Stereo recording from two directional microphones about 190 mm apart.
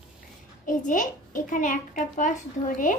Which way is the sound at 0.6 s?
45° left (ahead or behind).